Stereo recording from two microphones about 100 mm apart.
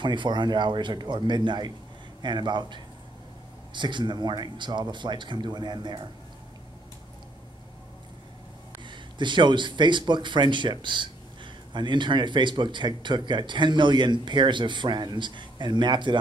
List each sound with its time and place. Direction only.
0.0 s speech: 50° right (ahead or behind)
8.8 s speech: 50° right (ahead or behind)